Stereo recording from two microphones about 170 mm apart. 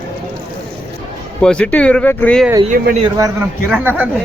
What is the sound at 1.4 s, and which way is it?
Speech, 5° left (ahead or behind).